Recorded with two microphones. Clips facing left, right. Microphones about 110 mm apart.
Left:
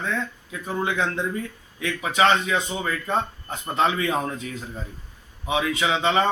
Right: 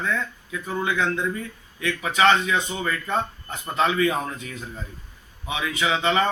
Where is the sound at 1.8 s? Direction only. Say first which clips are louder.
Right 1 dB; 25° left (ahead or behind).